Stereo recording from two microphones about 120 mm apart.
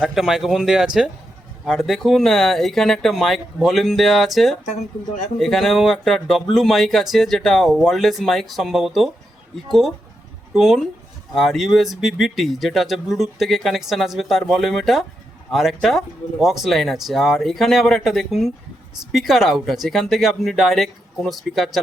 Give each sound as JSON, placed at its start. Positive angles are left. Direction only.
{"t": 0.0, "sound": "speech", "side_deg": -5}
{"t": 5.4, "sound": "speech", "side_deg": 0}
{"t": 10.5, "sound": "speech", "side_deg": 0}